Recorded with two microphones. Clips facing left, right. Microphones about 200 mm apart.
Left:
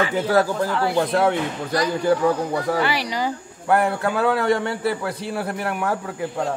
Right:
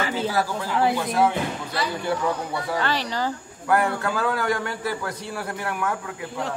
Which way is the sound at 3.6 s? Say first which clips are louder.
Left 3 dB; 25° left (ahead or behind).